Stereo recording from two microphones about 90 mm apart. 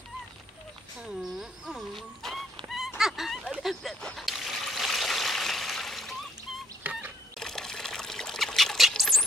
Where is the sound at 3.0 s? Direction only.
5° right (ahead or behind).